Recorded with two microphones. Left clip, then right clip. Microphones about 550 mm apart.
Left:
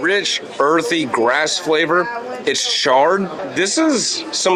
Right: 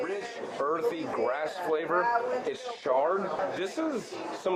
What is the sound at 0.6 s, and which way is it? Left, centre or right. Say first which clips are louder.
Speech: left 13 dB; left.